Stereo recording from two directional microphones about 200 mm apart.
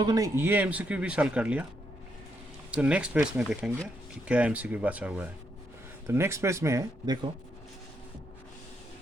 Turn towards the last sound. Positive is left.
turn(degrees=-15)  # may be behind; listen again after turning